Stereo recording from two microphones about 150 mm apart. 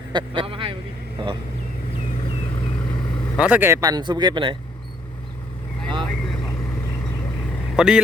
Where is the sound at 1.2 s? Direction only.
35° right (ahead or behind).